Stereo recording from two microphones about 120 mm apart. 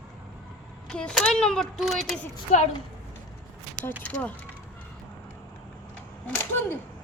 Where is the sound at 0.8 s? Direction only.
5° left (ahead or behind).